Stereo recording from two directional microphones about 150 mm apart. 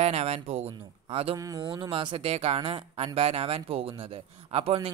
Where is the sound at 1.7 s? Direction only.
35° right (ahead or behind).